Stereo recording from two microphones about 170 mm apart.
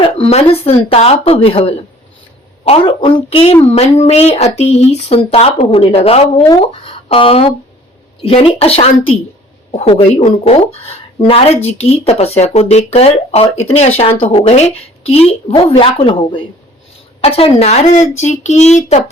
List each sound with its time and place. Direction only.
0.0 s speech: 35° left (ahead or behind)